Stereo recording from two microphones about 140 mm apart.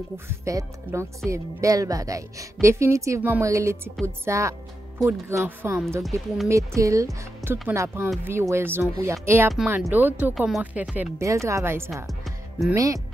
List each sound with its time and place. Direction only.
0.3 s speech: 20° right (ahead or behind)
10.3 s speech: centre (ahead or behind)
11.1 s speech: 20° right (ahead or behind)
11.9 s music: centre (ahead or behind)
12.7 s speech: 25° right (ahead or behind)